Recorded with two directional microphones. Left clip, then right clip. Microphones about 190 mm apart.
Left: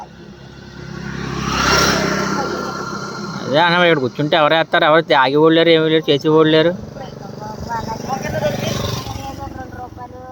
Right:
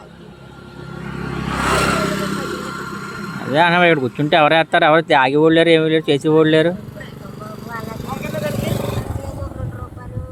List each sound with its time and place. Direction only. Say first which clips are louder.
1.5 s vehicle: left 3 dB; 25° left (ahead or behind)
2.0 s vehicle: left 3 dB; 30° right (ahead or behind)
2.4 s vehicle: left 4 dB; 55° right (ahead or behind)
3.5 s speech: even; 15° right (ahead or behind)
8.0 s vehicle: left 5 dB; 30° right (ahead or behind)
8.4 s vehicle: left 3 dB; 15° right (ahead or behind)
8.8 s vehicle: even; 15° left (ahead or behind)